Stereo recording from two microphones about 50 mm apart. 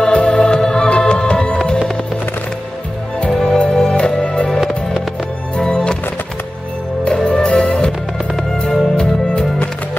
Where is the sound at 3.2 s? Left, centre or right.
Centre.